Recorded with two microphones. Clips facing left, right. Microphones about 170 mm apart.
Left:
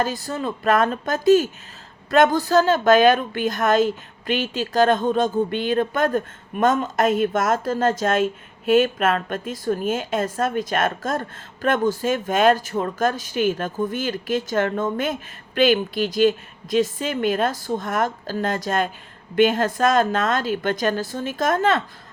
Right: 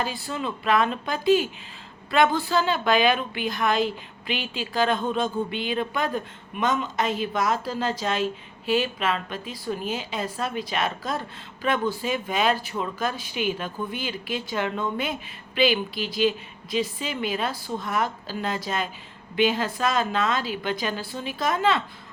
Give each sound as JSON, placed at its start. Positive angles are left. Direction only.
{"t": 0.0, "sound": "a woman's voice", "side_deg": 40}